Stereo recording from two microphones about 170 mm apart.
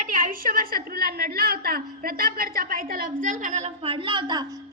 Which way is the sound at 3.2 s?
50° right (ahead or behind).